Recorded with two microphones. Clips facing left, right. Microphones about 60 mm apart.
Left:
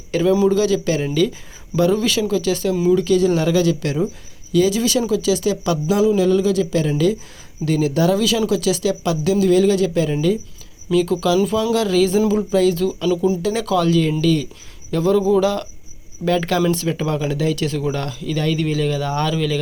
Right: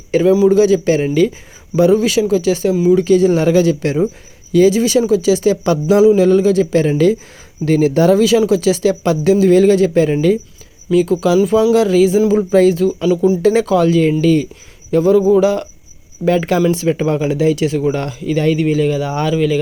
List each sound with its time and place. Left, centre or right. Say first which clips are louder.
0.1 s a man's voice: right 5 dB; right
10.9 s speech: right 4 dB; centre
12.5 s speech: right 7 dB; right
12.7 s speech: right 5 dB; right
14.8 s speech: right 5 dB; centre